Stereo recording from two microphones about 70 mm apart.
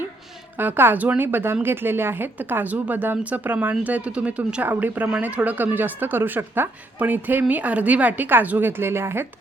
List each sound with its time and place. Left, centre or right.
0.5 s speech: right